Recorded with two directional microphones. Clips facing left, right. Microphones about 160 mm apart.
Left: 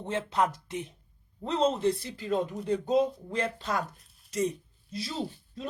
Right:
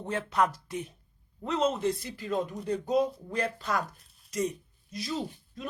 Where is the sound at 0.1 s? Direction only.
25° left (ahead or behind).